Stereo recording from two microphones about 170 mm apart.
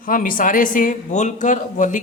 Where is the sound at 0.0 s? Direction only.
55° left (ahead or behind).